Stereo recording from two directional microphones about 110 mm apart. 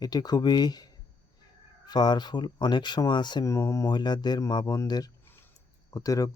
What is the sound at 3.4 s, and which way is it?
Speech, 25° left (ahead or behind).